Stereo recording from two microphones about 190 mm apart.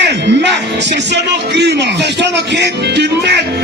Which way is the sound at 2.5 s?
65° right (ahead or behind).